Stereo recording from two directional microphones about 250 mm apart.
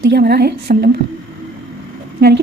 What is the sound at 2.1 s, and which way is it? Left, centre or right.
Speech, right.